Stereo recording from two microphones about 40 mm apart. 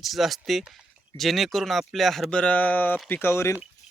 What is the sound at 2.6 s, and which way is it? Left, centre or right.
Speech, left.